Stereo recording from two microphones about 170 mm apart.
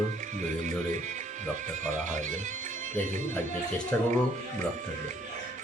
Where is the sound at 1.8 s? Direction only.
45° right (ahead or behind).